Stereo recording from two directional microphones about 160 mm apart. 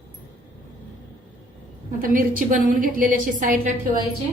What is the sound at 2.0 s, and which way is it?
A woman's voice, 60° right (ahead or behind).